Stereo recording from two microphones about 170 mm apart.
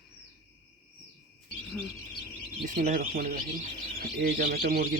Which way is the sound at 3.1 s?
55° right (ahead or behind).